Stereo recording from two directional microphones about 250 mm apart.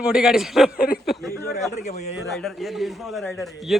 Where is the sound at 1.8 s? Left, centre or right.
Left.